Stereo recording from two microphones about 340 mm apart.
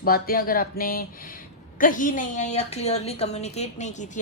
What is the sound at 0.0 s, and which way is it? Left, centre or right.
A woman's voice, left.